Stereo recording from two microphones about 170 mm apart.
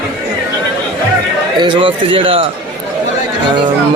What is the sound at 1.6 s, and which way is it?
Speech, 30° right (ahead or behind).